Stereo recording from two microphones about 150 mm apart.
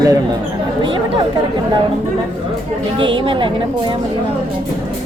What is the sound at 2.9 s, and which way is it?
Speech, 35° right (ahead or behind).